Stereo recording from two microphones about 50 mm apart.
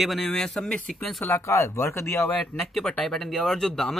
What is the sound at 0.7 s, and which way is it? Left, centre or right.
Speech, left.